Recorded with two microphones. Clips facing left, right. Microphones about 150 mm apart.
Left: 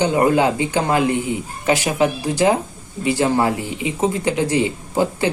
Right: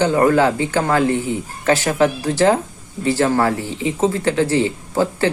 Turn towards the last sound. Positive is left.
turn(degrees=15)  # may be behind; listen again after turning